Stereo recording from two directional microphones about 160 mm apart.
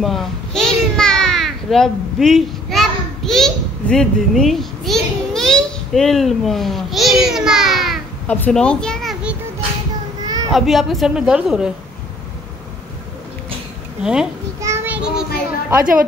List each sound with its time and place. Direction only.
0.0 s a sound: centre (ahead or behind)
8.3 s a child's voice: 10° left (ahead or behind)
10.2 s a sound: 25° right (ahead or behind)
10.5 s a woman's voice: centre (ahead or behind)
14.0 s a woman's voice: 5° right (ahead or behind)
14.6 s child singing: 15° right (ahead or behind)